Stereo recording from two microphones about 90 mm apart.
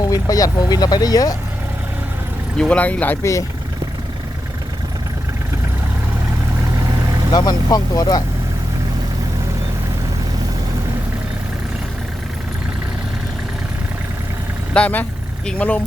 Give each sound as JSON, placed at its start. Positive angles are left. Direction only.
{"t": 0.0, "sound": "speech", "side_deg": 40}
{"t": 2.6, "sound": "speech", "side_deg": 15}
{"t": 7.3, "sound": "speech", "side_deg": 45}
{"t": 14.7, "sound": "speech", "side_deg": 15}